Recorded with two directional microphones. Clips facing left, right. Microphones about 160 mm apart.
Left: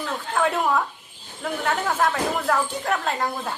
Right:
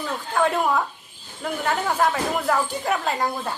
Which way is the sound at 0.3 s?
Centre (ahead or behind).